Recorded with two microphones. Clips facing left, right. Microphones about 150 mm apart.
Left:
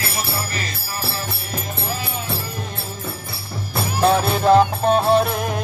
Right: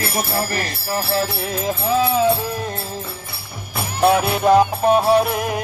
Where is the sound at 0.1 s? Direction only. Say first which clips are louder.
Right 5 dB; 50° right (ahead or behind); by 1.7 s 90° right.